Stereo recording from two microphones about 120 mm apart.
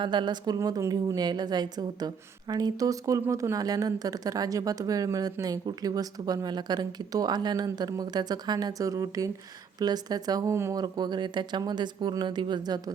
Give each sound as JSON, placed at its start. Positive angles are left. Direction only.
{"t": 0.0, "sound": "a woman's voice", "side_deg": -40}